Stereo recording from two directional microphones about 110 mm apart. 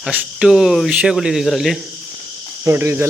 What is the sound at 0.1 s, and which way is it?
Speech, 10° right (ahead or behind).